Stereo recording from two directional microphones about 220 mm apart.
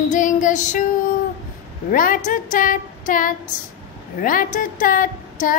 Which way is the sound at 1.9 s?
40° left (ahead or behind).